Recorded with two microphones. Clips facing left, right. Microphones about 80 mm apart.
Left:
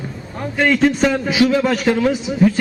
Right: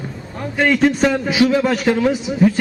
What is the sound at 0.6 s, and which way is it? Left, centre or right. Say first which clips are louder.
A man's voice: even; centre.